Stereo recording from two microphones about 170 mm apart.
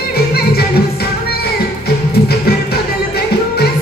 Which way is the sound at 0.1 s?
65° left (ahead or behind).